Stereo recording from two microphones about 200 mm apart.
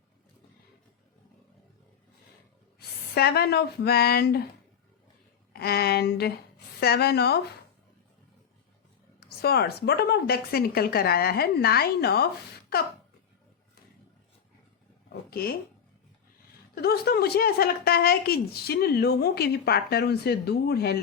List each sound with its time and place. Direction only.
2.7 s speech: 50° left (ahead or behind)
5.5 s a woman's voice: 50° left (ahead or behind)
9.4 s a woman's voice: 50° left (ahead or behind)
15.1 s speech: 50° left (ahead or behind)
16.7 s a woman's voice: 50° left (ahead or behind)